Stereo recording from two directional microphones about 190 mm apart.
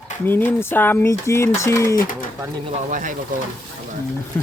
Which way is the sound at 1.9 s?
45° left (ahead or behind).